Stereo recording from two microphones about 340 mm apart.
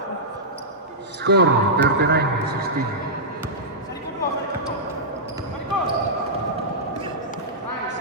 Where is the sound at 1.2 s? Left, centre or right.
Right.